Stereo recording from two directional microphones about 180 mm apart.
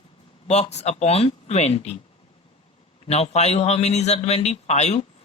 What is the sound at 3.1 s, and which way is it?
Speech, 35° left (ahead or behind).